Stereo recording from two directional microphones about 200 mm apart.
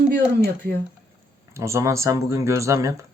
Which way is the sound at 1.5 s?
15° right (ahead or behind).